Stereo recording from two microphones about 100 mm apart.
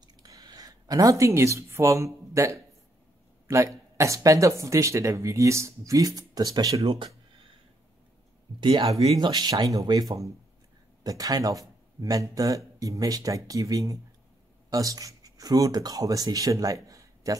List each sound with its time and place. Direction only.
0.2 s speech: 40° right (ahead or behind)
8.5 s speech: 50° right (ahead or behind); by 17.4 s 35° right (ahead or behind)